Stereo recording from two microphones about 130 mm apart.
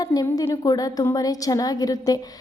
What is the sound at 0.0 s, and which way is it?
A woman's voice, 30° left (ahead or behind).